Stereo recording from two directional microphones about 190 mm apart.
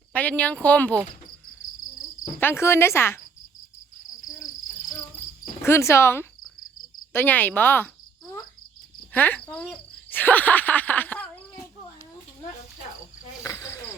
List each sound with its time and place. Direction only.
0.1 s speech: 10° left (ahead or behind)
2.4 s speech: 15° left (ahead or behind)
5.1 s insect: 30° left (ahead or behind)
5.6 s speech: 15° left (ahead or behind)
9.1 s speech: 10° left (ahead or behind)
13.4 s cricket: 15° left (ahead or behind)